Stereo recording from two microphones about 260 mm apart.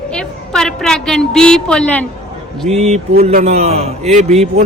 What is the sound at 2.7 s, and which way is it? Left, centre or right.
A man's voice, right.